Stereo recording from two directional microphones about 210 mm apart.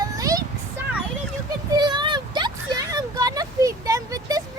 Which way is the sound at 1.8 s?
20° right (ahead or behind).